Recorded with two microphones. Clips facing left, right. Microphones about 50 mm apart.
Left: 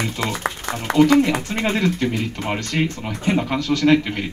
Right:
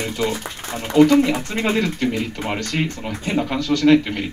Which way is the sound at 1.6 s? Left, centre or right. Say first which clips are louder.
Even; centre.